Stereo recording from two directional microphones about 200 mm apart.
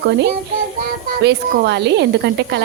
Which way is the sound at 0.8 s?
55° right (ahead or behind).